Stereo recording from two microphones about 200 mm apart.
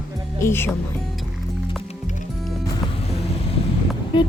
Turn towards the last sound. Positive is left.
turn(degrees=25)  # may be behind; listen again after turning